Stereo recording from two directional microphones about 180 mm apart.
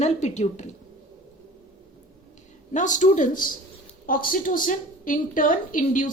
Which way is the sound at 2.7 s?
45° left (ahead or behind).